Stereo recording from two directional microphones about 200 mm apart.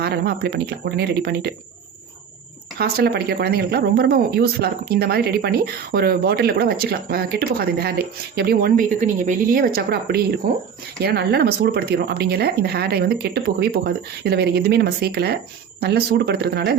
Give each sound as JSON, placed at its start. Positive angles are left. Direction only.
{"t": 0.0, "sound": "speech", "side_deg": -55}
{"t": 2.7, "sound": "speech", "side_deg": -50}
{"t": 11.0, "sound": "speech", "side_deg": -55}